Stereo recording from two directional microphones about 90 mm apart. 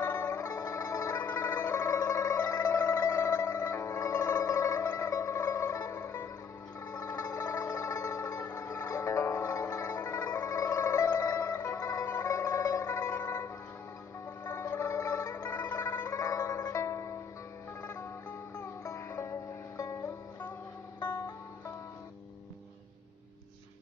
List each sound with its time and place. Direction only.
0.0 s music: 25° left (ahead or behind); by 1.1 s 40° left (ahead or behind)
1.1 s music: 25° left (ahead or behind)
1.9 s a sound: 35° left (ahead or behind)
6.9 s music: 40° left (ahead or behind)
15.0 s music: 40° left (ahead or behind)
15.5 s music: 25° left (ahead or behind)
18.6 s music: 30° left (ahead or behind)